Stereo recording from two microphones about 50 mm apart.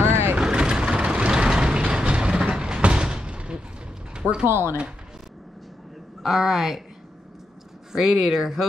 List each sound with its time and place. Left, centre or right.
0.0 s vehicle: right
0.4 s vehicle: centre
4.1 s a sound: centre
4.5 s speech: right
6.2 s a woman's voice: centre
7.9 s speech: centre